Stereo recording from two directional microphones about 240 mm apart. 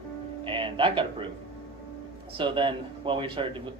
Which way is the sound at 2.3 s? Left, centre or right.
Right.